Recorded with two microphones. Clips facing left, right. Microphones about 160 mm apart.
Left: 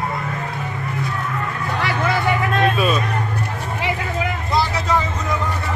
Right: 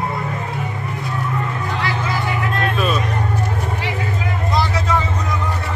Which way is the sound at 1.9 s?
65° left (ahead or behind).